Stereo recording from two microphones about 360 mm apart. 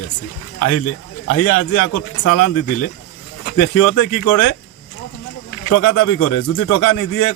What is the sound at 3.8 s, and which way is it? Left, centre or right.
Speech, left.